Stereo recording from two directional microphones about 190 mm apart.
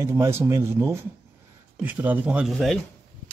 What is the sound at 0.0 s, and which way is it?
Speech, 15° right (ahead or behind).